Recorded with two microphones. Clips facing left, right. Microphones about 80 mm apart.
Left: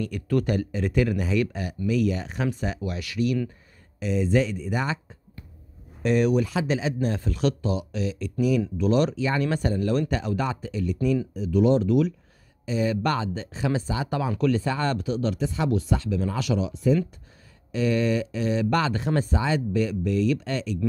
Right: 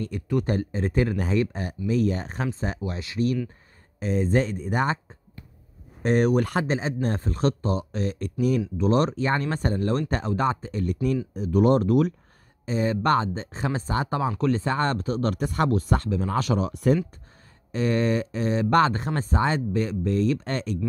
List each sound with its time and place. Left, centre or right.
0.0 s speech: right
0.5 s speech: right
6.0 s speech: right
6.7 s speech: right
16.7 s speech: right
17.6 s speech: right